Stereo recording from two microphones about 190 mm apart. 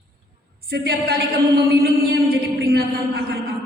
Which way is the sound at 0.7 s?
55° right (ahead or behind).